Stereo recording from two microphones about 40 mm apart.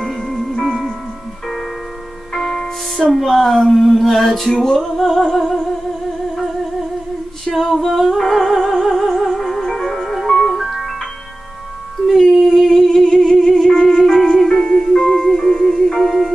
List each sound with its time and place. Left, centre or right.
0.0 s music: centre
2.3 s music: centre
3.1 s a sound: centre
7.4 s singing: centre
7.8 s music: centre
12.4 s humming: centre
13.7 s music: centre